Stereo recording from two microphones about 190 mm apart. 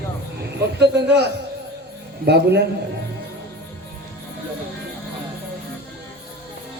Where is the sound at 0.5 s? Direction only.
60° right (ahead or behind).